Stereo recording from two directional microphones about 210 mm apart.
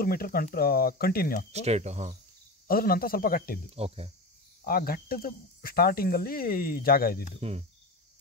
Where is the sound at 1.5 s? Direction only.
30° right (ahead or behind).